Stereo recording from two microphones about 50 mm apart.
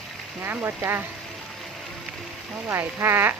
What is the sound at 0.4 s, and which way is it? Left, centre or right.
Speech, right.